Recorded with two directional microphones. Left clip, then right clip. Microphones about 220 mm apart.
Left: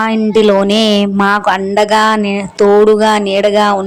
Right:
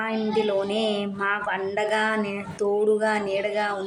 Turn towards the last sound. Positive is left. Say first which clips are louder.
# left 15 dB
turn(degrees=40)  # may be behind; listen again after turning